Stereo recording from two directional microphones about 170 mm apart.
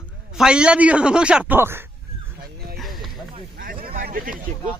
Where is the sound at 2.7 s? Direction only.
Centre (ahead or behind).